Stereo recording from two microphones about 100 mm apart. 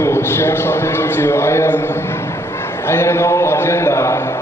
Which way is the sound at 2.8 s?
25° left (ahead or behind).